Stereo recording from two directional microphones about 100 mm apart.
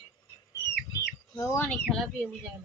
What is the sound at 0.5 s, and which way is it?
Chicken, 30° left (ahead or behind).